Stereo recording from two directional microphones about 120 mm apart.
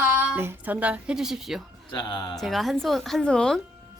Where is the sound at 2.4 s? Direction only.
Centre (ahead or behind).